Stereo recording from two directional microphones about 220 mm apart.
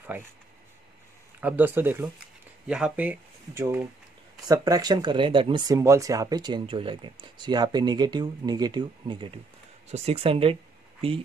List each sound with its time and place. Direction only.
0.0 s speech: 10° right (ahead or behind)
1.4 s speech: 10° right (ahead or behind); by 11.1 s 25° right (ahead or behind)